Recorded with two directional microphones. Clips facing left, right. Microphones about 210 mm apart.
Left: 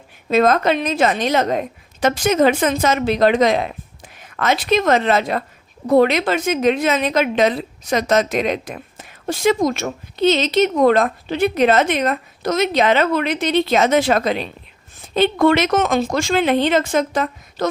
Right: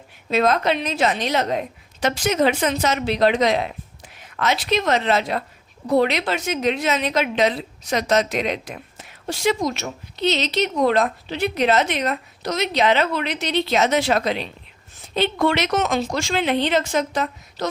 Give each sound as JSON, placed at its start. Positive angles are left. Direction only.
{"t": 0.3, "sound": "a woman's voice", "side_deg": 50}